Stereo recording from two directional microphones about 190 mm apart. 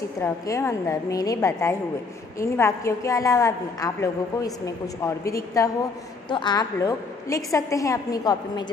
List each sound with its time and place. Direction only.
0.2 s a woman's voice: 15° left (ahead or behind)